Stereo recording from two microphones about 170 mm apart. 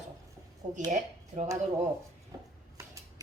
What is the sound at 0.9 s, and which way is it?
Speech, 45° right (ahead or behind).